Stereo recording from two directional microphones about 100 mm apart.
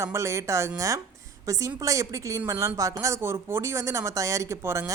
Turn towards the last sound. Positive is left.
turn(degrees=-25)  # may be behind; listen again after turning